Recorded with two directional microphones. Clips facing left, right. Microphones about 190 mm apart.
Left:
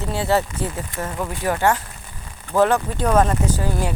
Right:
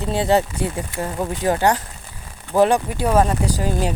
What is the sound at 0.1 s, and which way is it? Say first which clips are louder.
Speech: right 3 dB; 20° right (ahead or behind).